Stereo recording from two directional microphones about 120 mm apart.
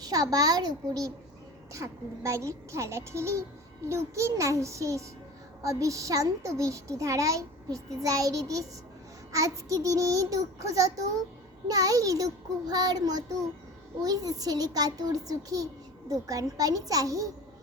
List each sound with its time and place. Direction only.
0.0 s a child's voice: 30° right (ahead or behind)